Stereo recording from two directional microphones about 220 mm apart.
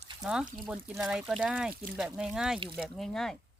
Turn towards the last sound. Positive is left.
turn(degrees=0)  # may be behind; listen again after turning